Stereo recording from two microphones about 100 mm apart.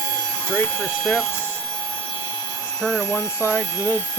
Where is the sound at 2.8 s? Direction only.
10° left (ahead or behind).